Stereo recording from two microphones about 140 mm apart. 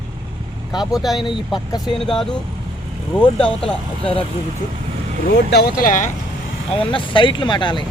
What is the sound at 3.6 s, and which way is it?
Speech, 40° left (ahead or behind).